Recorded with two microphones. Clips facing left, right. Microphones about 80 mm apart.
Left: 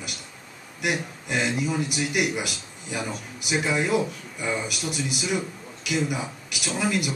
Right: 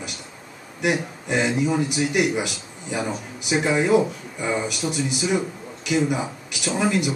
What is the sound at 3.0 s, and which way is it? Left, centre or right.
A man's voice, centre.